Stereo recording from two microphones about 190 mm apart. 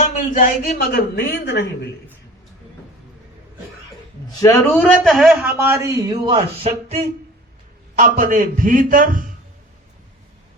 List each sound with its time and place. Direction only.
0.0 s a woman's voice: 40° left (ahead or behind); by 1.9 s 60° left (ahead or behind)
4.4 s a man's voice: 15° left (ahead or behind)
5.1 s speech: centre (ahead or behind); by 7.0 s 30° right (ahead or behind)
7.9 s a man's voice: 45° right (ahead or behind)